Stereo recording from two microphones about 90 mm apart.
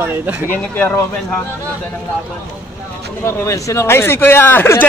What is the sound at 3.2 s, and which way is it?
Speech, 30° left (ahead or behind).